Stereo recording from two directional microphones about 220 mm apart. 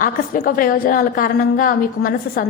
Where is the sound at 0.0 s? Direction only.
40° left (ahead or behind).